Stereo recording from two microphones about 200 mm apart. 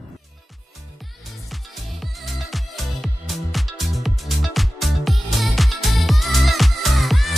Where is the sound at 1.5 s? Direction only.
Centre (ahead or behind).